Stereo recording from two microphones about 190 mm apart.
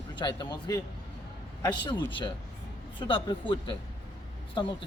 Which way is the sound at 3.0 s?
25° left (ahead or behind).